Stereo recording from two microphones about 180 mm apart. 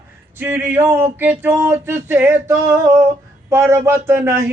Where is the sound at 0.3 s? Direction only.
10° right (ahead or behind).